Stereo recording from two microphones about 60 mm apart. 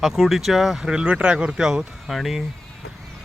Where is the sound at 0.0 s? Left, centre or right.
Centre.